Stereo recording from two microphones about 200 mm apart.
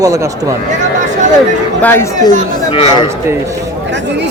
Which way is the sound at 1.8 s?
10° left (ahead or behind).